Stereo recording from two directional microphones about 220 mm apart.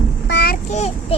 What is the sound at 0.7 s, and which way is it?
Speech, 30° left (ahead or behind).